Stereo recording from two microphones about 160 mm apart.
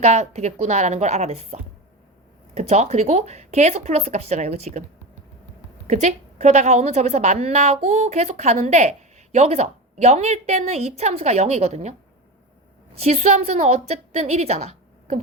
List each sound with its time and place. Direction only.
0.0 s a woman's voice: 45° right (ahead or behind)
2.6 s a woman's voice: 45° right (ahead or behind)
5.9 s a woman's voice: 45° right (ahead or behind)